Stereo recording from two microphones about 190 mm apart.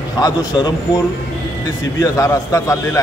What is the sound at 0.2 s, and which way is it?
A man's voice, 20° left (ahead or behind).